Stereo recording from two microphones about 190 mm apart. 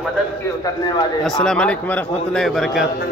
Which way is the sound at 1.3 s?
5° left (ahead or behind).